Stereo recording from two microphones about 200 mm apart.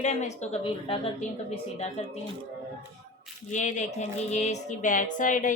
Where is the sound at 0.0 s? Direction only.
35° left (ahead or behind).